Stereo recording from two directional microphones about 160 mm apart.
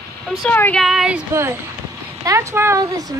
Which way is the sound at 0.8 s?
5° right (ahead or behind).